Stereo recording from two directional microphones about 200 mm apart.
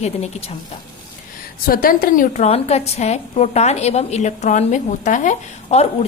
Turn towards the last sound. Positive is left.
turn(degrees=35)  # may be behind; listen again after turning